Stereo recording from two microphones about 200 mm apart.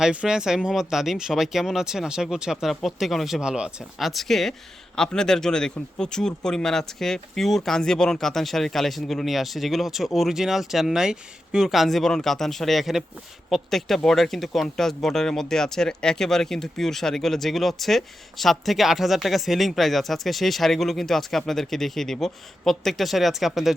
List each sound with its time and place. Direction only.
0.0 s speech: 5° right (ahead or behind)